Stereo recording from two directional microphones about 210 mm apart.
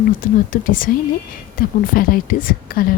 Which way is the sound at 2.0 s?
40° left (ahead or behind).